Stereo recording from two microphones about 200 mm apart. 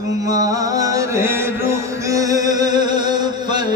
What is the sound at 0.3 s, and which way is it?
Music, 20° right (ahead or behind).